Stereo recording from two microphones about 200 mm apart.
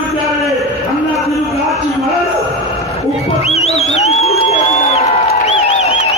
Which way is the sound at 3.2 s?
30° left (ahead or behind).